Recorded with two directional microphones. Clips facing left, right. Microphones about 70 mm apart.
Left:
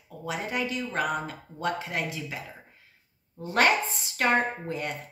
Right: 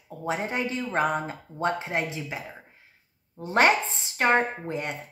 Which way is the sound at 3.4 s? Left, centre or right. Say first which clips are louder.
Right 2 dB; right.